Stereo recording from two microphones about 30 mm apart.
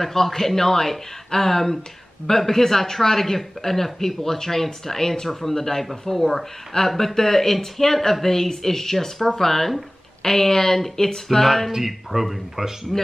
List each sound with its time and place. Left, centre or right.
0.0 s speech: centre
6.7 s speech: left
7.2 s speech: centre
11.7 s speech: centre
12.9 s speech: centre